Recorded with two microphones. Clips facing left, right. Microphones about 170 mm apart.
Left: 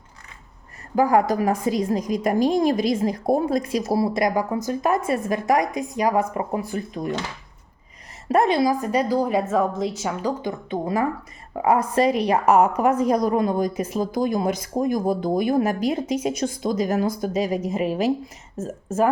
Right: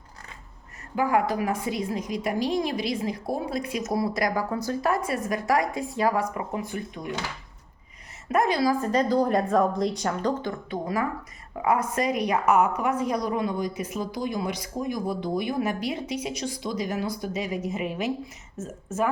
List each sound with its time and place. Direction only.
0.9 s a woman's voice: 40° left (ahead or behind); by 6.2 s 20° left (ahead or behind)
6.3 s a woman's voice: 35° left (ahead or behind)
8.3 s a woman's voice: 25° left (ahead or behind); by 10.5 s 5° left (ahead or behind)
10.7 s a woman's voice: 25° left (ahead or behind)